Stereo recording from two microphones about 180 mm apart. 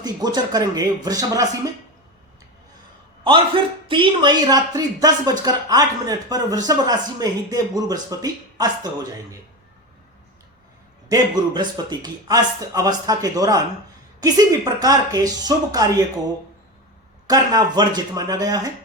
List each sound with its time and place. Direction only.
0.0 s speech: 20° right (ahead or behind)
3.8 s speech: 30° right (ahead or behind)
11.1 s speech: 25° right (ahead or behind)
17.2 s speech: 20° right (ahead or behind)